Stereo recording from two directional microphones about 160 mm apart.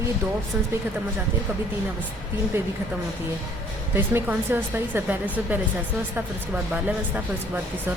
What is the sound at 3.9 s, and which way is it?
Speech, 15° right (ahead or behind).